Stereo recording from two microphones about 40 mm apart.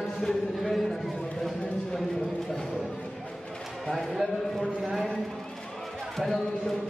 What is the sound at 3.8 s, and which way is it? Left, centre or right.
A man's voice, centre.